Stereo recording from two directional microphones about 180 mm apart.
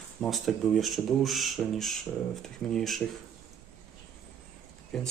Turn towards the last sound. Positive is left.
turn(degrees=5)  # may be behind; listen again after turning